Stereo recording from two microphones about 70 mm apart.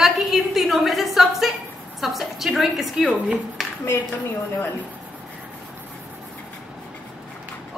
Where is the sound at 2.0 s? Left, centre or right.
Centre.